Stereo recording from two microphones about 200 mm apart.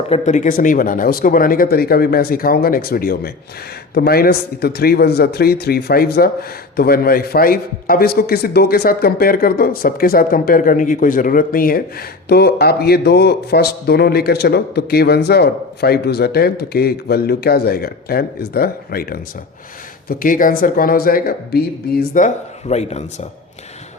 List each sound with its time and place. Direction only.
0.1 s a man's voice: 35° left (ahead or behind)
22.7 s speech: 35° left (ahead or behind)